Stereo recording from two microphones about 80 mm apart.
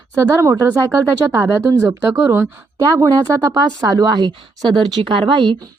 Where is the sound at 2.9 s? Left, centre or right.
Right.